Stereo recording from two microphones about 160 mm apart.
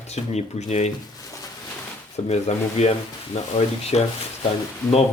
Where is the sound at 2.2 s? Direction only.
45° left (ahead or behind).